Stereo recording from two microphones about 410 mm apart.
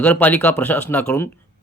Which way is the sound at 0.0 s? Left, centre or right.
Centre.